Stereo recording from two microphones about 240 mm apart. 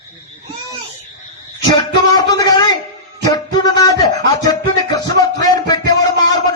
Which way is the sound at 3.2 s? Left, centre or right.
Centre.